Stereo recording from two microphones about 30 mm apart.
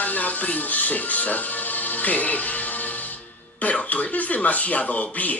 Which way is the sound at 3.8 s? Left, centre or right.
Left.